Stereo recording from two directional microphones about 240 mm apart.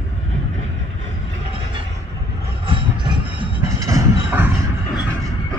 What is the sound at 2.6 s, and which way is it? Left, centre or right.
Vehicle, right.